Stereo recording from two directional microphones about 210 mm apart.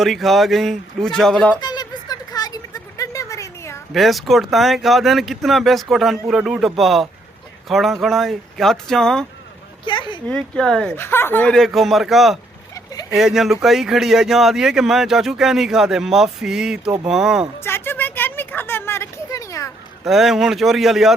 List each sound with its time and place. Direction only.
0.0 s speech: centre (ahead or behind)
1.6 s a sound: 20° left (ahead or behind)
3.9 s speech: centre (ahead or behind)
9.8 s a sound: 20° left (ahead or behind)
10.2 s speech: 5° left (ahead or behind)
12.7 s vehicle: 15° left (ahead or behind)
13.1 s speech: centre (ahead or behind)
17.6 s a sound: 10° left (ahead or behind)
20.1 s speech: centre (ahead or behind)